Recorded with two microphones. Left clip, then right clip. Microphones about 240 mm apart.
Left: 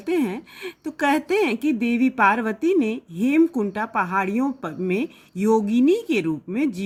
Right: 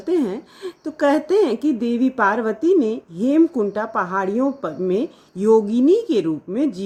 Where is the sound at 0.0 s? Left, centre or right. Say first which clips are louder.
Right 3 dB; left.